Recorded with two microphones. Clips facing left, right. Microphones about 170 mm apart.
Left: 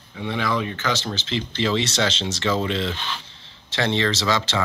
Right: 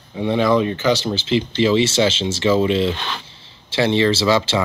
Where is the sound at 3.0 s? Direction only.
70° right (ahead or behind).